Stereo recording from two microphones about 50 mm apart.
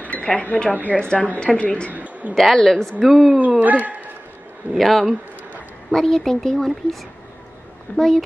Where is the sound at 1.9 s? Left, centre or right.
Right.